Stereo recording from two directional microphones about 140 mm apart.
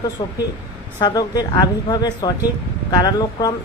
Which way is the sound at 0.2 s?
35° left (ahead or behind).